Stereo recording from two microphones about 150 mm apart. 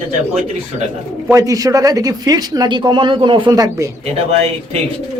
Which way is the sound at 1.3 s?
20° right (ahead or behind).